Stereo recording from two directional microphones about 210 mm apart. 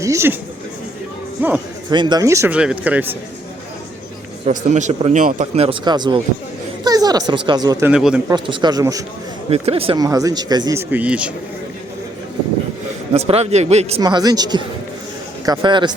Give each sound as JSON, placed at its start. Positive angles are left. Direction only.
{"t": 0.0, "sound": "speech", "side_deg": -15}
{"t": 1.4, "sound": "speech", "side_deg": -10}
{"t": 1.9, "sound": "speech", "side_deg": -20}
{"t": 4.4, "sound": "speech", "side_deg": -30}
{"t": 7.9, "sound": "a man's voice", "side_deg": -5}
{"t": 8.3, "sound": "speech", "side_deg": -20}
{"t": 9.5, "sound": "speech", "side_deg": -25}
{"t": 13.1, "sound": "a man's voice", "side_deg": -30}
{"t": 14.0, "sound": "speech", "side_deg": -20}